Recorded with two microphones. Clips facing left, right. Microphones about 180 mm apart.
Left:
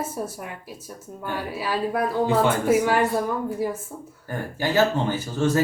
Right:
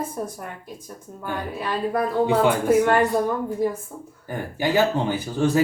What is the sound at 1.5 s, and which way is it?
Female singing, 5° left (ahead or behind).